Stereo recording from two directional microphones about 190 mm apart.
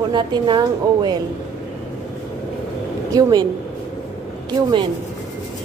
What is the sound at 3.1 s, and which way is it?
Speech, 20° right (ahead or behind).